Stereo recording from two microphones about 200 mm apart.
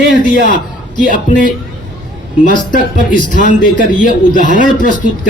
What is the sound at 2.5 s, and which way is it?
A man's voice, 40° left (ahead or behind).